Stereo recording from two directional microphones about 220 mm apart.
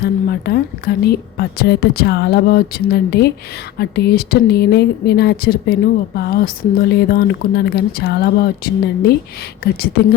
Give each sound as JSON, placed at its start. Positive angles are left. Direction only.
{"t": 0.0, "sound": "a woman's voice", "side_deg": 45}